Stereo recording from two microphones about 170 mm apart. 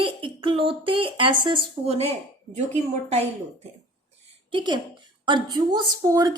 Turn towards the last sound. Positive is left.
turn(degrees=-20)  # may be behind; listen again after turning